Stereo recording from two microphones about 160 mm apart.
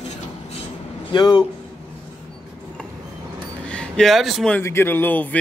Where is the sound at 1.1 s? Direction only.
30° left (ahead or behind).